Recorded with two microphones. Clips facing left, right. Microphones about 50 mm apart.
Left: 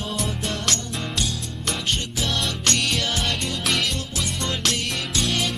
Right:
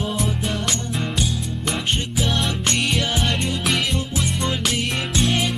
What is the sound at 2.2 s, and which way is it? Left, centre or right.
Music, centre.